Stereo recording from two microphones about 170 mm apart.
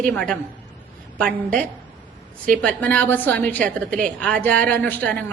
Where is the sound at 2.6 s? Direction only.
10° left (ahead or behind).